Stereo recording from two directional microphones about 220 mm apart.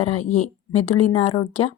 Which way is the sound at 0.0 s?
30° left (ahead or behind).